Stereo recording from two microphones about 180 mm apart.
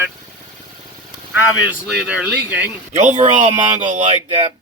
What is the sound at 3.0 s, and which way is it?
Speech, 40° right (ahead or behind).